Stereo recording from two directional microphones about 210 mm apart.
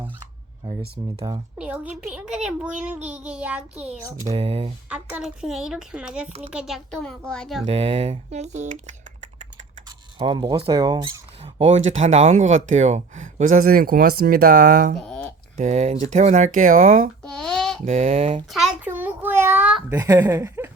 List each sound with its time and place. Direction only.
0.7 s speech: 50° right (ahead or behind)
1.5 s speech: 5° right (ahead or behind)
4.3 s speech: 30° right (ahead or behind)
4.9 s speech: 5° right (ahead or behind)
7.6 s speech: 30° right (ahead or behind)
10.2 s speech: 20° right (ahead or behind); by 14.9 s 40° right (ahead or behind)
14.9 s a sound: 5° left (ahead or behind)
15.5 s speech: 35° right (ahead or behind)
17.2 s a sound: 5° left (ahead or behind)
17.8 s speech: 35° right (ahead or behind)
18.5 s a sound: 5° right (ahead or behind)
20.0 s speech: 20° right (ahead or behind)